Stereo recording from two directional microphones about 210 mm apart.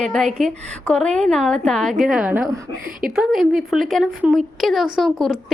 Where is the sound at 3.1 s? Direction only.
Centre (ahead or behind).